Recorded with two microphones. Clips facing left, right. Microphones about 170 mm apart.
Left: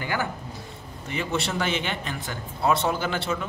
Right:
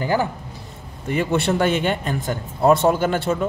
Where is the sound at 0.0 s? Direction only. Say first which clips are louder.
Right 8 dB; 35° right (ahead or behind).